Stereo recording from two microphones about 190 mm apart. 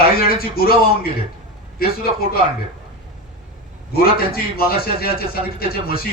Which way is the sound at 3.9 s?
50° left (ahead or behind).